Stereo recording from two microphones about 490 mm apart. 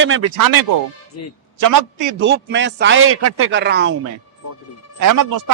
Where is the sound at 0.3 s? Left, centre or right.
Right.